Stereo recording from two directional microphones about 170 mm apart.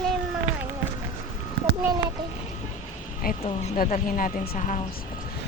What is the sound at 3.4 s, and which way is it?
Speech, 40° left (ahead or behind).